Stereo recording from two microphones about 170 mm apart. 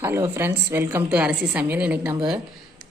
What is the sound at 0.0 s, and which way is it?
A woman's voice, 15° right (ahead or behind).